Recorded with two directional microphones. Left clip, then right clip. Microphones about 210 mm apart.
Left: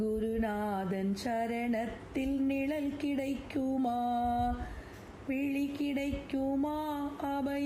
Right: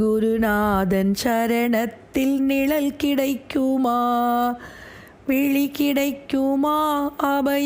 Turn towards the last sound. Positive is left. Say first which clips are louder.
# right 14 dB
turn(degrees=-45)  # may be behind; listen again after turning